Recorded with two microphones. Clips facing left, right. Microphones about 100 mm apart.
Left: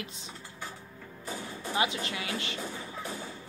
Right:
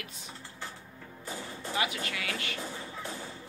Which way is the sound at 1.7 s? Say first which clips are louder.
Left 2 dB; 25° left (ahead or behind).